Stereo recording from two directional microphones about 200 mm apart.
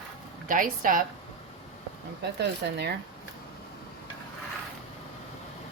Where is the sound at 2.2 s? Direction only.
60° right (ahead or behind).